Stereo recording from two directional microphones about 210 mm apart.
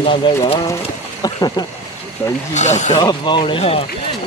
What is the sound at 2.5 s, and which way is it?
Speech, 35° left (ahead or behind).